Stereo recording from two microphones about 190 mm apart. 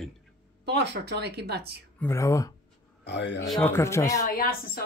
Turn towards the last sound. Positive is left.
turn(degrees=50)  # may be behind; listen again after turning